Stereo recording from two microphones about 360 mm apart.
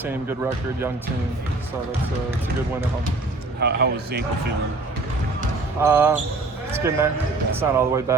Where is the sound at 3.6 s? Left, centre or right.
Right.